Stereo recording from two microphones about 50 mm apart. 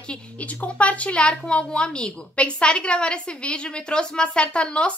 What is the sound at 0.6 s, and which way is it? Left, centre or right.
A woman's voice, left.